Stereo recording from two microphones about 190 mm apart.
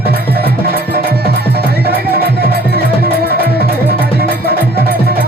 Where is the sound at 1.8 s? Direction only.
55° right (ahead or behind).